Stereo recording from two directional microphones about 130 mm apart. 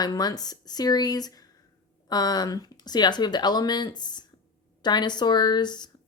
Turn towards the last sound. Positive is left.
turn(degrees=35)  # may be behind; listen again after turning